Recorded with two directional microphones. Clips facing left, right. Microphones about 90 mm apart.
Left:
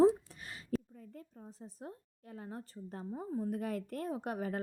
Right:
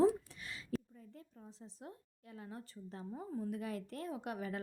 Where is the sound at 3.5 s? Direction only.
45° left (ahead or behind).